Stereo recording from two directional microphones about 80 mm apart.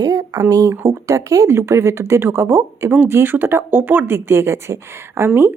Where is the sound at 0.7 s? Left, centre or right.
Right.